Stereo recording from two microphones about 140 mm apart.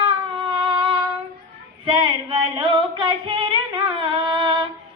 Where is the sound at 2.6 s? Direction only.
35° right (ahead or behind).